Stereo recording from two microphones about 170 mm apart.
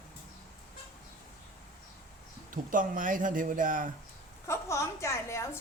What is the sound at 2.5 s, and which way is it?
Speech, 50° right (ahead or behind).